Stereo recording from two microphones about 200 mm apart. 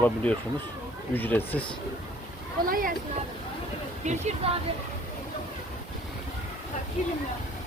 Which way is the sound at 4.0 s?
35° right (ahead or behind).